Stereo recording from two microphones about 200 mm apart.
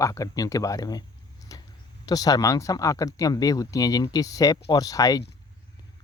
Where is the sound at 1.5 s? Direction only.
15° left (ahead or behind).